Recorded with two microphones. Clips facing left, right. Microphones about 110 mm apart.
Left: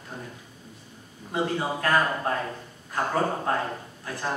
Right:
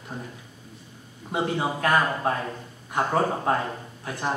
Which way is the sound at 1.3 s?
20° right (ahead or behind).